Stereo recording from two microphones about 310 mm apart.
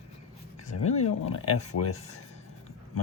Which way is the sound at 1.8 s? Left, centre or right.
Left.